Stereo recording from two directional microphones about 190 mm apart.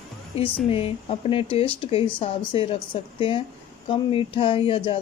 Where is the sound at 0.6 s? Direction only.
30° left (ahead or behind).